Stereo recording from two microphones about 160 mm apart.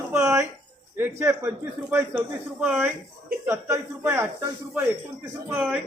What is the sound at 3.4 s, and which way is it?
A man's voice, 15° right (ahead or behind).